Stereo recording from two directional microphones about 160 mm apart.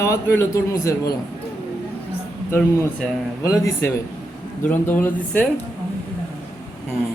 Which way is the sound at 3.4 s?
20° left (ahead or behind).